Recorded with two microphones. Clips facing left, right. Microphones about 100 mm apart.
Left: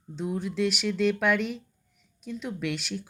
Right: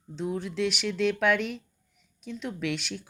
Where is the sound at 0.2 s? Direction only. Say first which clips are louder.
Left 1 dB; 5° left (ahead or behind).